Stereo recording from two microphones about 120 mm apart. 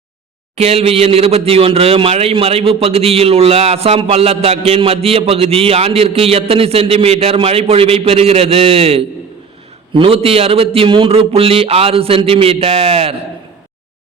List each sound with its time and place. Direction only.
0.5 s a man's voice: 55° right (ahead or behind)